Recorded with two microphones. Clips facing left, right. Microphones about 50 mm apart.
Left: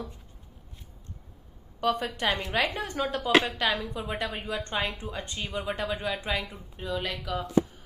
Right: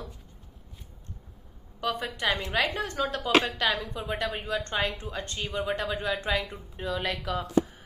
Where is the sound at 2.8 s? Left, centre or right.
Left; by 4.6 s centre.